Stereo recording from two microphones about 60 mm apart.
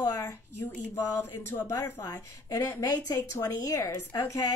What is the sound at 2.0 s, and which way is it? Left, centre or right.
Speech, left.